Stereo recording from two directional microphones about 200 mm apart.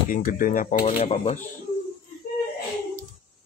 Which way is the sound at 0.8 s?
30° left (ahead or behind).